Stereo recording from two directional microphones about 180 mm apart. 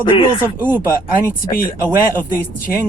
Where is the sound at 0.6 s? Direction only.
10° right (ahead or behind).